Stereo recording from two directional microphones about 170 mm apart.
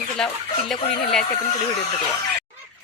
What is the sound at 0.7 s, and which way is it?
Speech, 5° left (ahead or behind).